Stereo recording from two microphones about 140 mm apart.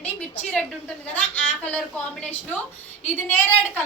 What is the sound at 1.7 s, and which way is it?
A woman's voice, 10° left (ahead or behind).